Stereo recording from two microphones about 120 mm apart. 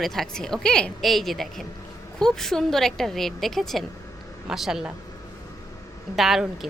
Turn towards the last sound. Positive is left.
turn(degrees=0)  # may be behind; listen again after turning